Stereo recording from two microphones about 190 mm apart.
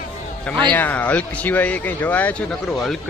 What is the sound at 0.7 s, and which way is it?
Speech, 10° left (ahead or behind).